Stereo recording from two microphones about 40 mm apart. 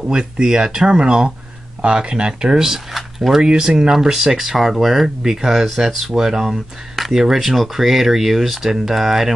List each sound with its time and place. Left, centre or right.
0.0 s speech: centre
3.0 s a sound: centre
3.4 s speech: centre